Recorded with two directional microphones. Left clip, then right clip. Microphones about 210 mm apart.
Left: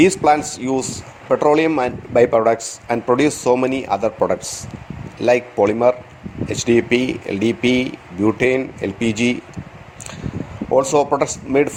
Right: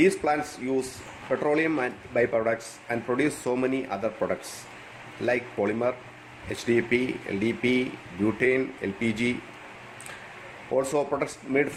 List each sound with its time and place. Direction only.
0.0 s a man's voice: 35° left (ahead or behind)
10.8 s a man's voice: 35° left (ahead or behind)